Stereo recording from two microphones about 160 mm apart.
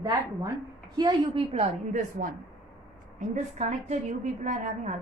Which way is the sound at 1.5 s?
50° right (ahead or behind).